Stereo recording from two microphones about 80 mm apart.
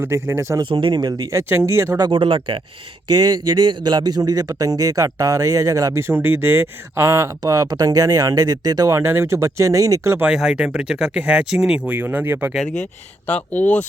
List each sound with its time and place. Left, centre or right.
0.0 s speech: right
0.6 s speech: right
1.3 s speech: right
2.0 s speech: right
3.1 s a man's voice: right
9.0 s speech: right
10.2 s speech: centre; by 12.5 s right
13.2 s speech: left